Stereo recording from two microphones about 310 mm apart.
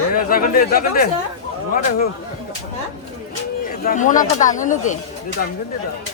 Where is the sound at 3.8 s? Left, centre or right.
Left.